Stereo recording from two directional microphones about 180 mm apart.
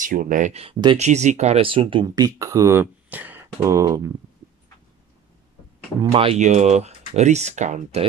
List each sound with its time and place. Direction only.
0.0 s speech: 50° right (ahead or behind); by 4.1 s 15° right (ahead or behind)
6.1 s speech: 35° right (ahead or behind)